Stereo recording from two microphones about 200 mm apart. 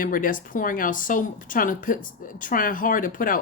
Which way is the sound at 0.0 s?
45° left (ahead or behind).